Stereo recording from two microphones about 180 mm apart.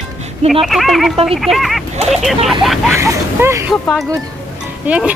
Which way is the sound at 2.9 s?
15° right (ahead or behind).